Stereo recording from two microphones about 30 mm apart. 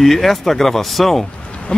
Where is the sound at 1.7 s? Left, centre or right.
Left.